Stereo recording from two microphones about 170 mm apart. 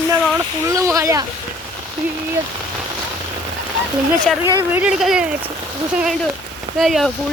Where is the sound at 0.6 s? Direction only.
20° right (ahead or behind).